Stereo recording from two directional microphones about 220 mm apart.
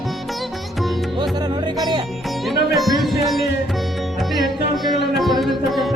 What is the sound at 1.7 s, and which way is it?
Music, 15° right (ahead or behind).